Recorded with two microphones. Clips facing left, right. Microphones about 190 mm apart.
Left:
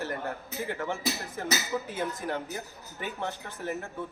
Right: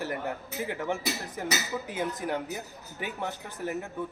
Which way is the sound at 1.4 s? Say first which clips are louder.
Left 2 dB; 10° right (ahead or behind).